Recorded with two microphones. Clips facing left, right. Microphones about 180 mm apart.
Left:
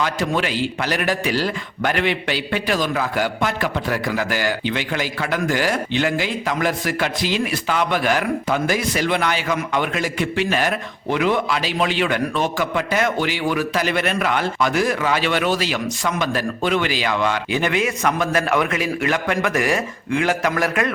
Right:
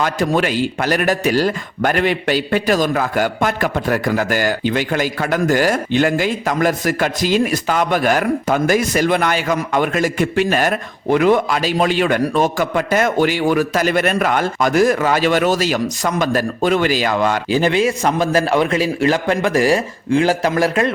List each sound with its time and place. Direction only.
0.0 s a man's voice: 45° right (ahead or behind); by 20.9 s 30° right (ahead or behind)